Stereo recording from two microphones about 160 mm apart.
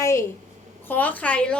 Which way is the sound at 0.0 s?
20° left (ahead or behind).